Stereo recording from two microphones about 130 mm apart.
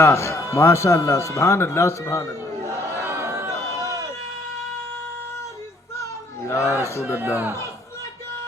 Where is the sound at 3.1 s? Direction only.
20° right (ahead or behind).